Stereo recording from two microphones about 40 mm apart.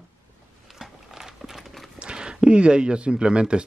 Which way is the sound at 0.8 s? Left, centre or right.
Centre.